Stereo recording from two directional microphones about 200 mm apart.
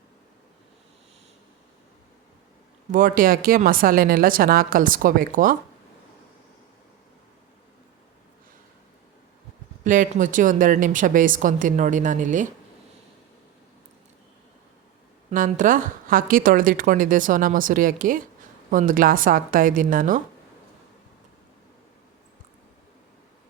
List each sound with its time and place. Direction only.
2.9 s a woman's voice: 45° right (ahead or behind)
9.8 s a woman's voice: 40° right (ahead or behind)
15.3 s a woman's voice: 40° right (ahead or behind)